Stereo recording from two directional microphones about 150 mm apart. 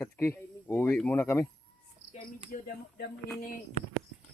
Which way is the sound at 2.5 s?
60° left (ahead or behind).